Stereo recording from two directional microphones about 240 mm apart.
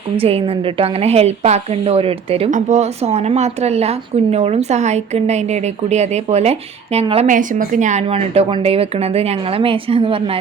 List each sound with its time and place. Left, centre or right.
0.2 s a woman's voice: right